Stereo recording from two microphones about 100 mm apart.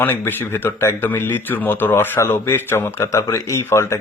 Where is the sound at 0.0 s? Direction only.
20° left (ahead or behind).